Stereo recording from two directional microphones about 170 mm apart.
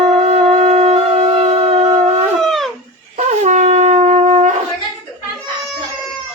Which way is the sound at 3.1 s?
45° right (ahead or behind).